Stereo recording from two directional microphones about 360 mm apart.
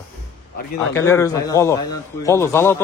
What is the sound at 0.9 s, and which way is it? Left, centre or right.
A man's voice, centre.